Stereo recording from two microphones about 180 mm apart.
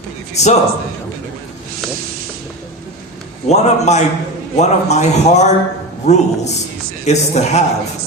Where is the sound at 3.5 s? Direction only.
40° left (ahead or behind).